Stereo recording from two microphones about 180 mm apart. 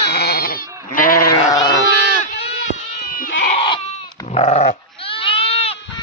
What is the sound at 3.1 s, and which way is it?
Goat, 50° left (ahead or behind).